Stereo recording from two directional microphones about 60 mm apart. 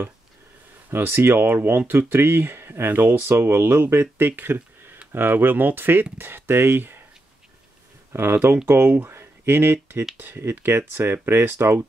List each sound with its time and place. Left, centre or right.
0.8 s speech: right
8.1 s speech: right